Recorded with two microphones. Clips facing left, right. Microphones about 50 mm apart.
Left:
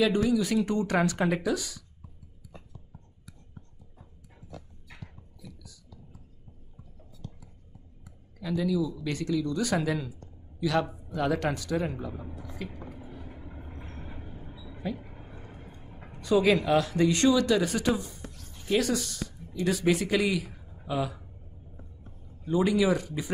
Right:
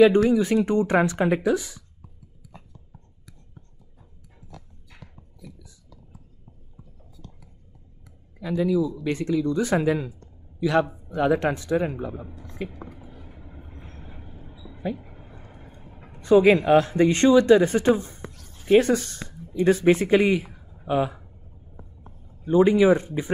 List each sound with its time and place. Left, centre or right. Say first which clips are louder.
0.0 s speech: right 8 dB; right
8.4 s speech: right 5 dB; right
13.1 s vehicle: left 2 dB; centre
15.6 s vehicle: right 1 dB; centre
16.2 s speech: right 7 dB; right
22.4 s speech: right 7 dB; right